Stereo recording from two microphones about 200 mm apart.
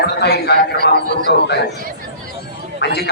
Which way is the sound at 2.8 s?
55° left (ahead or behind).